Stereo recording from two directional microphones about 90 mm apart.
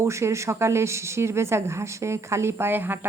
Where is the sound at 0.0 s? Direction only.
30° right (ahead or behind).